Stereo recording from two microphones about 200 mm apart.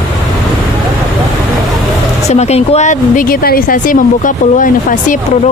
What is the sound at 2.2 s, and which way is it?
A woman's voice, 35° left (ahead or behind).